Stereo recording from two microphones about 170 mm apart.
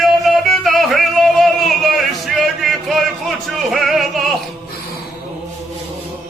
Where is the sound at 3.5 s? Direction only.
Centre (ahead or behind).